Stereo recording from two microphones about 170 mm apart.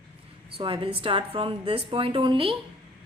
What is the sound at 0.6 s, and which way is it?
A woman's voice, 30° right (ahead or behind).